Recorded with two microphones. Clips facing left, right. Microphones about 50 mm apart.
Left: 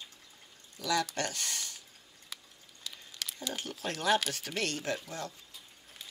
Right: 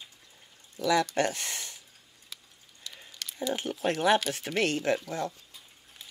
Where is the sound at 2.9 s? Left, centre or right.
Centre.